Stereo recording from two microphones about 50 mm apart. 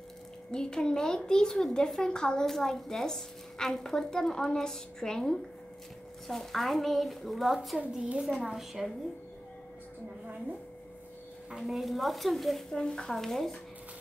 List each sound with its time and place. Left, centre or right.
0.5 s a woman's voice: centre
8.0 s a child's voice: centre
8.5 s a woman's voice: centre
11.5 s a woman's voice: centre
12.7 s a woman's voice: centre